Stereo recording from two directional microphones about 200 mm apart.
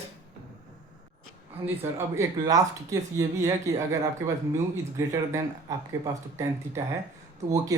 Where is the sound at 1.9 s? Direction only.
15° right (ahead or behind).